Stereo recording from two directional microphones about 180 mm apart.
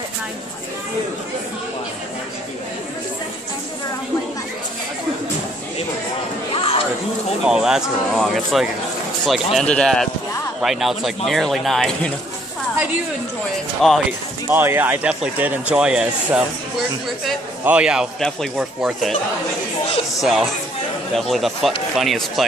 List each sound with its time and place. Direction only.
6.5 s a sound: 30° left (ahead or behind)
7.4 s speech: 5° right (ahead or behind)
13.8 s speech: centre (ahead or behind)
14.5 s speech: 10° right (ahead or behind)
17.6 s speech: 5° right (ahead or behind)
20.2 s speech: centre (ahead or behind)